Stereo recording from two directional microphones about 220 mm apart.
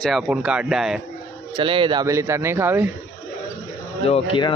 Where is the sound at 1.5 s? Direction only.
25° right (ahead or behind).